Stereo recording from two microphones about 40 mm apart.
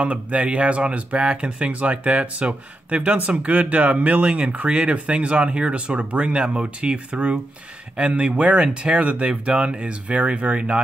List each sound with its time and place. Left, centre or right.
0.0 s speech: right